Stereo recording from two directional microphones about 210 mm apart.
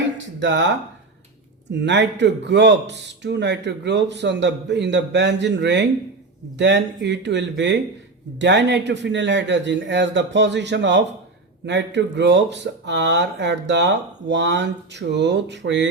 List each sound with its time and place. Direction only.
0.3 s speech: 60° right (ahead or behind)
1.8 s speech: 55° right (ahead or behind)